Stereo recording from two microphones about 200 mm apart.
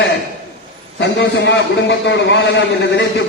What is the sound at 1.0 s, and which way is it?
A man's voice, 60° left (ahead or behind).